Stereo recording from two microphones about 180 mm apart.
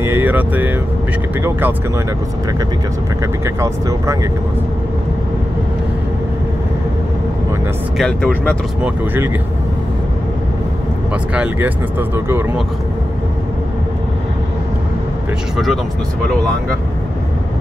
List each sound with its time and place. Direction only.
0.0 s vehicle: 10° right (ahead or behind)
3.4 s speech: 15° right (ahead or behind)
8.0 s speech: 5° left (ahead or behind)
8.8 s speech: 10° right (ahead or behind)
11.3 s speech: 10° right (ahead or behind)
15.5 s speech: centre (ahead or behind)